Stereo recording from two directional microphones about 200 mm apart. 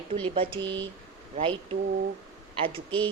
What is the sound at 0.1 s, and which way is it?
Speech, 25° right (ahead or behind).